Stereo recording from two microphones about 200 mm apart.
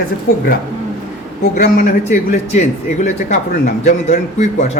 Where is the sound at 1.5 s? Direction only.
40° left (ahead or behind).